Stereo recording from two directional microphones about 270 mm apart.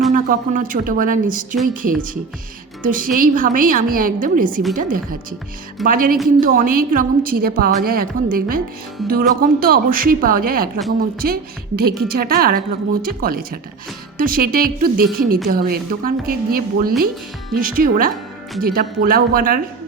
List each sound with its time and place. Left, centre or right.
0.1 s a woman's voice: right